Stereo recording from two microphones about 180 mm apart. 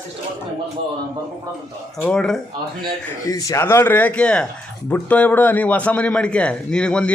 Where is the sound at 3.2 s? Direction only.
20° left (ahead or behind).